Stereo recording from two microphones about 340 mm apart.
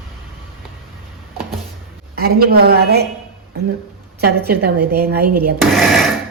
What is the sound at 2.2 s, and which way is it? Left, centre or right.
Speech, right.